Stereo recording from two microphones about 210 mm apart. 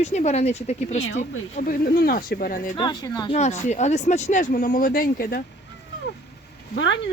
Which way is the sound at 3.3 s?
30° left (ahead or behind).